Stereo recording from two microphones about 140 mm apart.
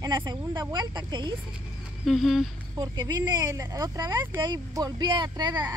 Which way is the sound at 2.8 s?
30° right (ahead or behind).